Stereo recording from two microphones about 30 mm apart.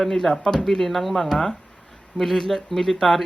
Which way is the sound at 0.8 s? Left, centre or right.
Centre.